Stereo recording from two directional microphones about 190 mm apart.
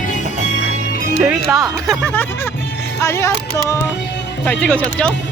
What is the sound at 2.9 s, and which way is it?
Music, 15° left (ahead or behind).